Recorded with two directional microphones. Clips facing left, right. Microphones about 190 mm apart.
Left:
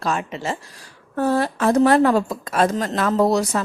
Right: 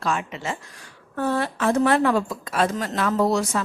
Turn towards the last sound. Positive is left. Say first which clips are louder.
# left 3 dB
turn(degrees=40)  # may be behind; listen again after turning